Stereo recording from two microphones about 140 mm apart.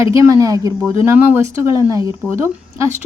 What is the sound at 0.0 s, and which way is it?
A woman's voice, 20° right (ahead or behind).